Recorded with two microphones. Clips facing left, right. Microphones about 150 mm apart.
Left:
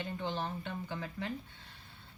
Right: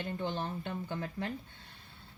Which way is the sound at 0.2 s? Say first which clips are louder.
Right 1 dB; 50° right (ahead or behind).